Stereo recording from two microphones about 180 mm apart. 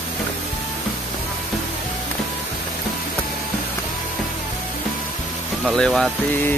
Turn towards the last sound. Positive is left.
turn(degrees=5)  # may be behind; listen again after turning